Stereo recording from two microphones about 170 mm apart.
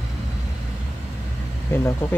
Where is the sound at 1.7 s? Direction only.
15° left (ahead or behind).